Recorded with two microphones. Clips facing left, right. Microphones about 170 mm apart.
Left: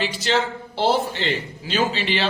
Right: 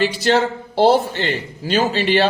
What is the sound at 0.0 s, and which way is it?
Speech, 40° right (ahead or behind).